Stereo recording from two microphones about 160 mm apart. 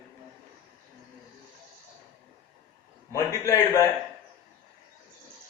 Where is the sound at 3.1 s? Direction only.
20° left (ahead or behind).